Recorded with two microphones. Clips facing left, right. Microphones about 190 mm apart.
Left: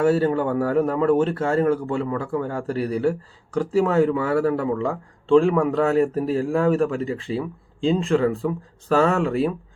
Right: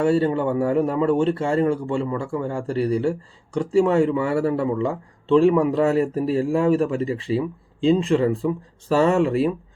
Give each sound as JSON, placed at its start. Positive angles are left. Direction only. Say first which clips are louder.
{"t": 0.0, "sound": "speech", "louder": "even", "side_deg": 5}